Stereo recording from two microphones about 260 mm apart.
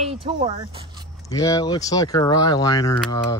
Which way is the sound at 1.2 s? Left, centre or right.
Centre.